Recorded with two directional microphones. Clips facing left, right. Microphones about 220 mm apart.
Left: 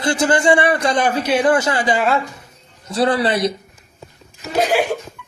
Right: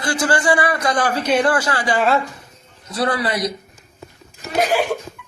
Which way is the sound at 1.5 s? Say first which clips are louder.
Left 3 dB; 25° left (ahead or behind).